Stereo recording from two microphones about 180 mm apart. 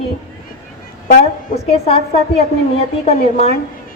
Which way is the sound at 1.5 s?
35° left (ahead or behind).